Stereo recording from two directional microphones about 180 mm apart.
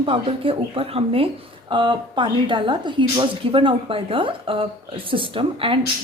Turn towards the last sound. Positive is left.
turn(degrees=-30)  # may be behind; listen again after turning